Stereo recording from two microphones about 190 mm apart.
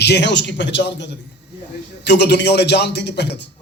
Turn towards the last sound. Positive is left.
turn(degrees=65)  # may be behind; listen again after turning